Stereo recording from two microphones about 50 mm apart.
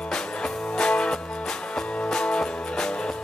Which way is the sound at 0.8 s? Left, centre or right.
Centre.